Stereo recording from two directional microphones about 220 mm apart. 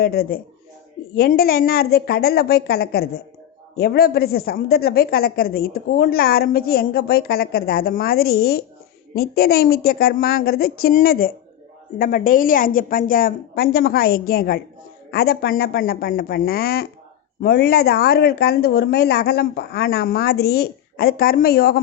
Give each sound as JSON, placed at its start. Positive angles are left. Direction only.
{"t": 0.0, "sound": "a woman's voice", "side_deg": 45}